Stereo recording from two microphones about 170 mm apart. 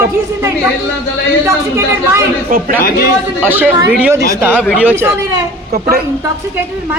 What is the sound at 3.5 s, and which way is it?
Speech, 10° right (ahead or behind).